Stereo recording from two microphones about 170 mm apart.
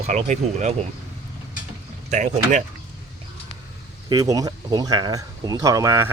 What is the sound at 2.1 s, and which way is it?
Speech, 45° right (ahead or behind).